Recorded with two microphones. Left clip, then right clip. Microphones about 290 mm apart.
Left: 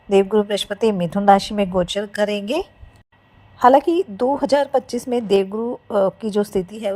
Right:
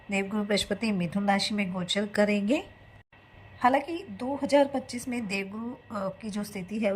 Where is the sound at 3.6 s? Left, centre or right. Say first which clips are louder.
Left 12 dB; left.